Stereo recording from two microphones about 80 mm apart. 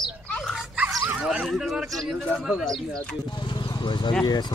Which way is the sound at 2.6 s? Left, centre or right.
Centre.